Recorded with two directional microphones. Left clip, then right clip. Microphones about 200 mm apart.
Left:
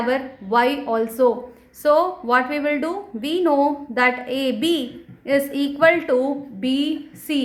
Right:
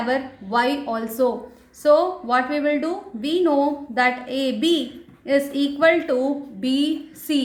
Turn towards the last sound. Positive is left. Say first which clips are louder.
# right 1 dB
turn(degrees=30)  # may be behind; listen again after turning